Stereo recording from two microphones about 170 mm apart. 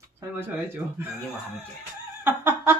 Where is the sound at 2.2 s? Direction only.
15° right (ahead or behind).